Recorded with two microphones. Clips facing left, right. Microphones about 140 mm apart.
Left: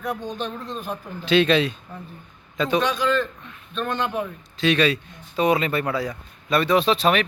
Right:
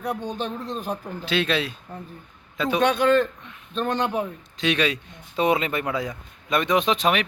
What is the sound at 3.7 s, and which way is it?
Speech, 30° right (ahead or behind).